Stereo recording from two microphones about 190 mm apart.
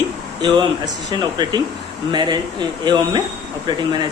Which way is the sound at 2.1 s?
25° right (ahead or behind).